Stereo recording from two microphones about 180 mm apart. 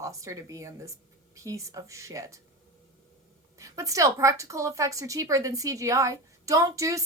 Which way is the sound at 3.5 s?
20° right (ahead or behind).